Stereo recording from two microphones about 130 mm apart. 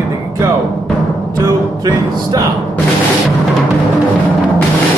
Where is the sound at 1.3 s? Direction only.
30° right (ahead or behind).